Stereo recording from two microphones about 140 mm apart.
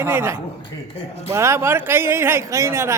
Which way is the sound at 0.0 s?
15° right (ahead or behind).